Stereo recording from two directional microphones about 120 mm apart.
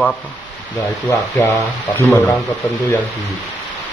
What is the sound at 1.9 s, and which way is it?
Speech, 15° left (ahead or behind).